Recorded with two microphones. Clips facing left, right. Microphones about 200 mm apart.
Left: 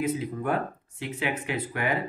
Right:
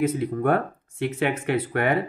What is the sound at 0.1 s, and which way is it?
Speech, 60° right (ahead or behind).